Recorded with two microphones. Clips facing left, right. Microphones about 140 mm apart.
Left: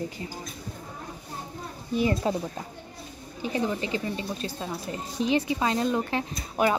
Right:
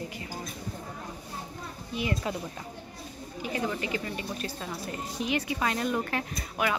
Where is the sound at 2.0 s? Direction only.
35° left (ahead or behind).